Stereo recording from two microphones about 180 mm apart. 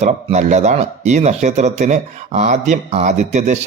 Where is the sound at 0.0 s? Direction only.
40° right (ahead or behind).